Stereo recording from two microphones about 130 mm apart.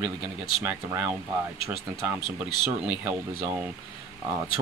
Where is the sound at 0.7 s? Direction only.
15° right (ahead or behind).